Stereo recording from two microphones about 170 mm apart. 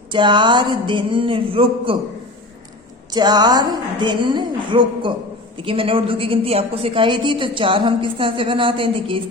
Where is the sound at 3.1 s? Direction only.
25° right (ahead or behind).